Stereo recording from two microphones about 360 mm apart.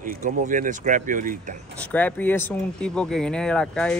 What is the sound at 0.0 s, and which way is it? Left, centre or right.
Speech, right.